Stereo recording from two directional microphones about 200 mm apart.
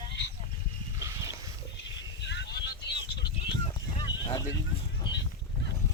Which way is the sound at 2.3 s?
60° left (ahead or behind).